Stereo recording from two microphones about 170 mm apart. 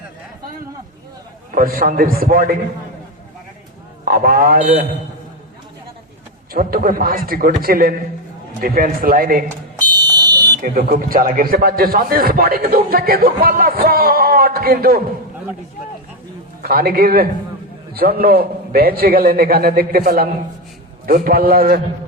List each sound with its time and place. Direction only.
1.5 s a man's voice: 55° right (ahead or behind)
4.0 s a man's voice: 55° right (ahead or behind)
6.5 s a man's voice: 60° right (ahead or behind)
9.7 s fire alarm: 25° right (ahead or behind)
10.6 s a man's voice: 60° right (ahead or behind)
16.6 s a man's voice: 60° right (ahead or behind)